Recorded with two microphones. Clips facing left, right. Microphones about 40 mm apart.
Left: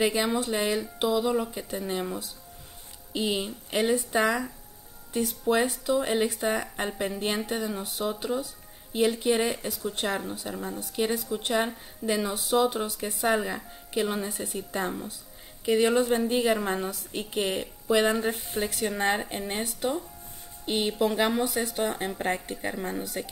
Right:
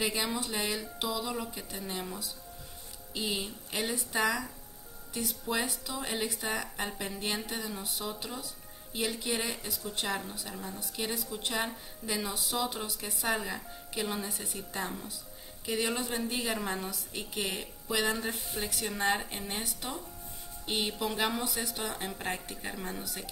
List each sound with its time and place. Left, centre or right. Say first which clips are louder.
0.0 s speech: left 7 dB; centre
5.6 s speech: left 10 dB; centre
21.0 s speech: left 10 dB; centre